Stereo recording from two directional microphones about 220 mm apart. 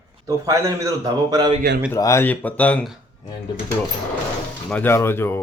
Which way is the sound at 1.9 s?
15° left (ahead or behind).